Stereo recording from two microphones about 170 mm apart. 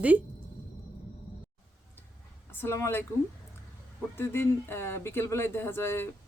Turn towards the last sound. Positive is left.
turn(degrees=15)  # may be behind; listen again after turning